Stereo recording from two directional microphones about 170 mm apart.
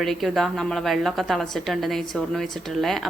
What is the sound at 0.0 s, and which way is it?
A woman's voice, centre (ahead or behind).